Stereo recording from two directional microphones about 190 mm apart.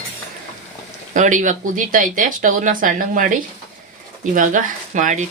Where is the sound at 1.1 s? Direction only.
40° right (ahead or behind).